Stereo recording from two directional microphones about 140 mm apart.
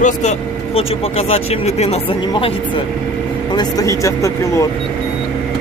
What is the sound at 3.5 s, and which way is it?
Speech, 30° left (ahead or behind).